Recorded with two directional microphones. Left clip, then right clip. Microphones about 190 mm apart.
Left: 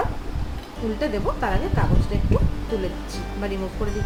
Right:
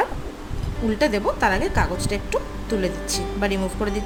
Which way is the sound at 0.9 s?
65° right (ahead or behind).